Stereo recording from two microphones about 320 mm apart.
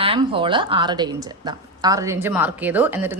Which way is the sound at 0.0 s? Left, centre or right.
Centre.